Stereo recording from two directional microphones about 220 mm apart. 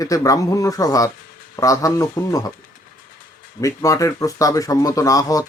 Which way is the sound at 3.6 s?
15° left (ahead or behind).